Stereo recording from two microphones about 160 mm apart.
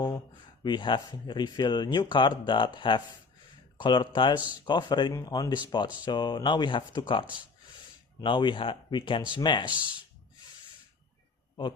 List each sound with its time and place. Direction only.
0.6 s speech: 30° left (ahead or behind)